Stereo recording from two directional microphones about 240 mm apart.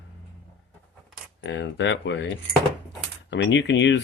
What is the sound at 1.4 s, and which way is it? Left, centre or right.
Speech, left.